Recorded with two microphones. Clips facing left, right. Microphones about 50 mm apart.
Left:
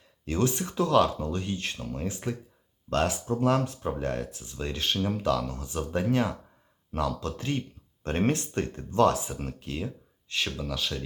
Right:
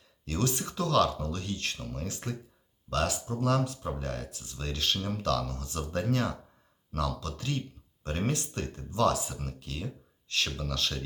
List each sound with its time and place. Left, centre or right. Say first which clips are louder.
0.3 s speech: left 4 dB; left; by 11.0 s centre